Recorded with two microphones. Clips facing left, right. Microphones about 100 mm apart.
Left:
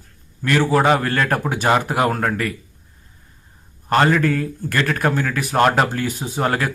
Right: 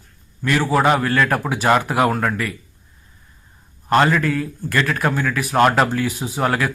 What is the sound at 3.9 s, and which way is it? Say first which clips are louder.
Speech: even; 40° left (ahead or behind).